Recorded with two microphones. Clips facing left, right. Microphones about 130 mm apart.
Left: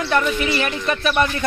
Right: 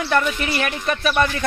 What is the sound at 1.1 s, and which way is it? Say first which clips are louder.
Speech: even; 15° left (ahead or behind).